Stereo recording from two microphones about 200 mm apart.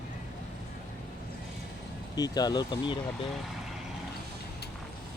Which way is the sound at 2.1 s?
20° left (ahead or behind).